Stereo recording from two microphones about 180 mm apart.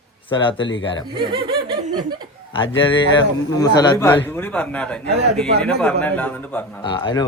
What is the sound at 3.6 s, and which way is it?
Speech, 20° left (ahead or behind).